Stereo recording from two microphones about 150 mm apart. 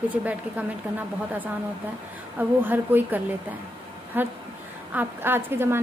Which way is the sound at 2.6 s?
10° right (ahead or behind).